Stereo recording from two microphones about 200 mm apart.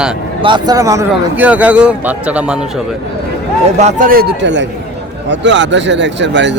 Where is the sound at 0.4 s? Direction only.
20° right (ahead or behind).